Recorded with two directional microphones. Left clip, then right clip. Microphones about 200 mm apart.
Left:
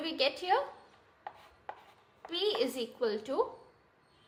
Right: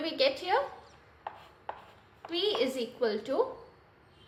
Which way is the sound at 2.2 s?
20° left (ahead or behind).